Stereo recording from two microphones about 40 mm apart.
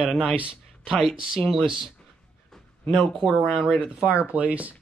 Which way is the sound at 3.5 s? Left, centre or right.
Centre.